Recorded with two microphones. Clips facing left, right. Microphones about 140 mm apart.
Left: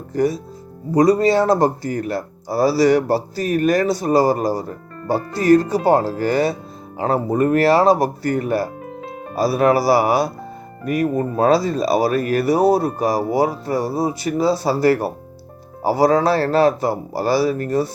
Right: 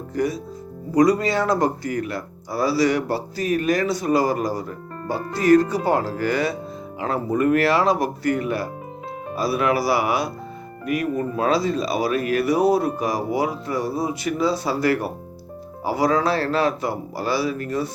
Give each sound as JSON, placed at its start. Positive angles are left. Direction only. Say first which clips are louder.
{"t": 0.1, "sound": "speech", "louder": "left 5 dB", "side_deg": 35}